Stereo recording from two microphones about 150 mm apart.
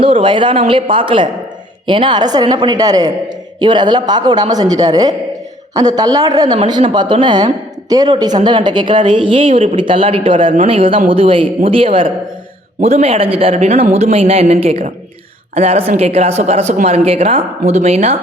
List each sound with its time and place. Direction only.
0.0 s a woman's voice: 35° right (ahead or behind)